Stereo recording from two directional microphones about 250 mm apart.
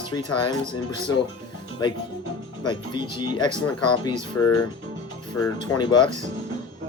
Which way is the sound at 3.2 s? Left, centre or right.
Centre.